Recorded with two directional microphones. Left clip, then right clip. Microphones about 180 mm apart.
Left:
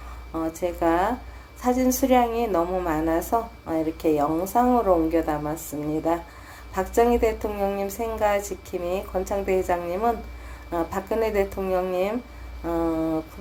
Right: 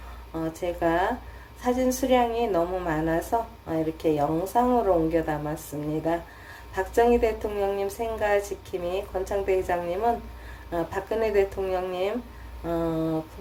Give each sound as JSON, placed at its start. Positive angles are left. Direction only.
{"t": 0.3, "sound": "a woman's voice", "side_deg": 15}
{"t": 6.7, "sound": "a woman's voice", "side_deg": 20}